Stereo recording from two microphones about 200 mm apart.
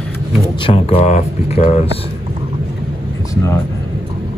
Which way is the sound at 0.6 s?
30° left (ahead or behind).